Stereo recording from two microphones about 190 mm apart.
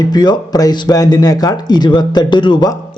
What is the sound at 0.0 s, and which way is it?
Speech, 20° left (ahead or behind).